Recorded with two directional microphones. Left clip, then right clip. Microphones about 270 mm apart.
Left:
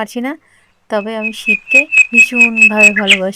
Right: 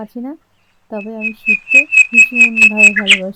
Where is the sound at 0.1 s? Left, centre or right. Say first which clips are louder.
Left 7 dB; left.